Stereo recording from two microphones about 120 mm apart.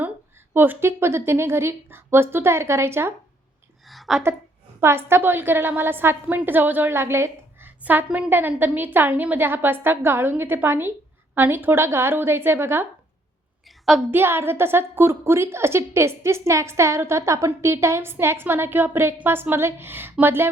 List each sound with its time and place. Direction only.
0.5 s a woman's voice: 15° right (ahead or behind)
3.8 s a sound: centre (ahead or behind)
4.8 s a woman's voice: 20° right (ahead or behind)
14.1 s a woman's voice: 20° right (ahead or behind)